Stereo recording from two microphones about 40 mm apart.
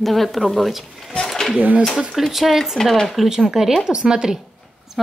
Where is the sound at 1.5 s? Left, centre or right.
Right.